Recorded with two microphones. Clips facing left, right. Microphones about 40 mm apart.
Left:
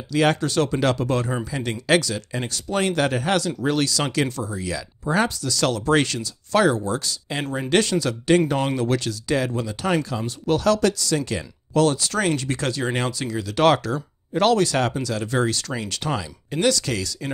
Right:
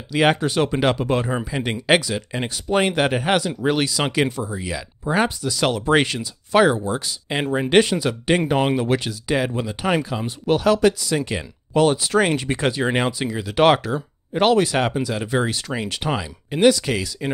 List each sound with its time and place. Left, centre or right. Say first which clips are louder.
0.1 s speech: right 2 dB; right